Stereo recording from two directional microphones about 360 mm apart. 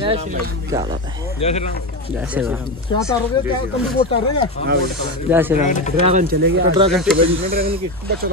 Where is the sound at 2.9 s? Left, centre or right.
Centre.